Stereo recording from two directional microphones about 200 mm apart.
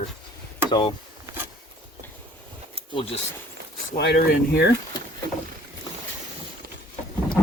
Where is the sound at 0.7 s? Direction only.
25° left (ahead or behind).